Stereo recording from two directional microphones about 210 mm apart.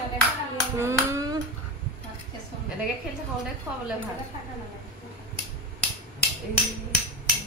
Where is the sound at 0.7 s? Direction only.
15° right (ahead or behind).